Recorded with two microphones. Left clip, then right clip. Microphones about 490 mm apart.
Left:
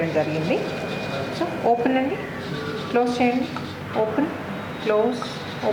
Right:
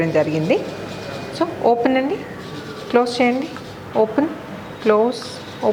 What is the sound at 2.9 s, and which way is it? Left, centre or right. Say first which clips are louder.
Speech: right 5 dB; right.